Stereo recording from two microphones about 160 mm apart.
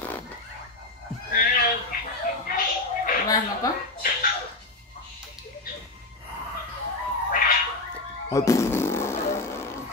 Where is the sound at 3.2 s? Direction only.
20° left (ahead or behind).